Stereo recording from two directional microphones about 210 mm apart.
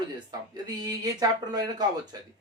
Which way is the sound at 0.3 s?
20° right (ahead or behind).